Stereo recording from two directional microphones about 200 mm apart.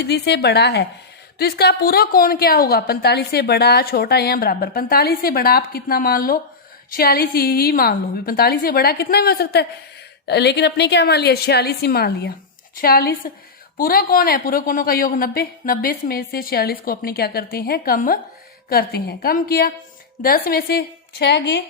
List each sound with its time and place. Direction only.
0.0 s a woman's voice: 55° left (ahead or behind)